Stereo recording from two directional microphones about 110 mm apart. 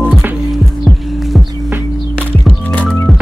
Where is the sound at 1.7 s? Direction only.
15° right (ahead or behind).